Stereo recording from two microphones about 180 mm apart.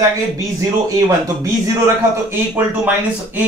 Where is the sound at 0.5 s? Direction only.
20° right (ahead or behind).